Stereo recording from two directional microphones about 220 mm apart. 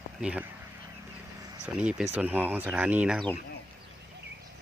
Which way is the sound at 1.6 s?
5° right (ahead or behind).